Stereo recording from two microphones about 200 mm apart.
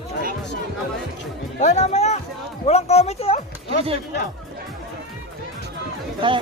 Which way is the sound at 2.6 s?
30° left (ahead or behind).